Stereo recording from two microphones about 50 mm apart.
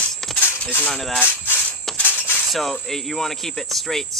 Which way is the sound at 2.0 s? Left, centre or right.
Left.